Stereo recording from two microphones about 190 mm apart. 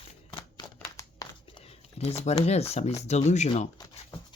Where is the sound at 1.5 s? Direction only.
30° left (ahead or behind).